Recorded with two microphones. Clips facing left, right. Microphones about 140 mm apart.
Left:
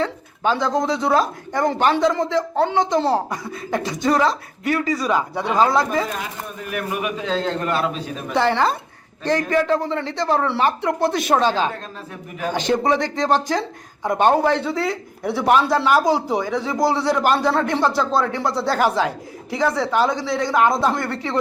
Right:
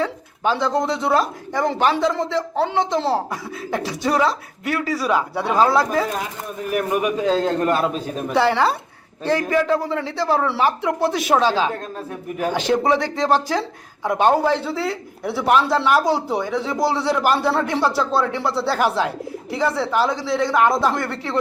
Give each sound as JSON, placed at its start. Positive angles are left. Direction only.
{"t": 0.0, "sound": "speech", "side_deg": -5}
{"t": 7.6, "sound": "a man's voice", "side_deg": -45}
{"t": 8.3, "sound": "a woman's voice", "side_deg": -10}